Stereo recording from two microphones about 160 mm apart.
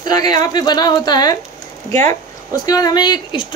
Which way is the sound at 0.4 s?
25° left (ahead or behind).